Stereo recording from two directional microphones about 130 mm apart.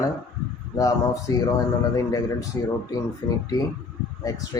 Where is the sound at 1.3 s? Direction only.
20° left (ahead or behind).